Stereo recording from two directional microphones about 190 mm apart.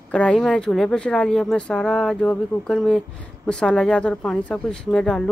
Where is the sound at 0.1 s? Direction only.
5° left (ahead or behind).